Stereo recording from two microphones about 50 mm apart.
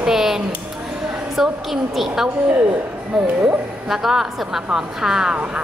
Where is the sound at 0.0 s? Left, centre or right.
Centre.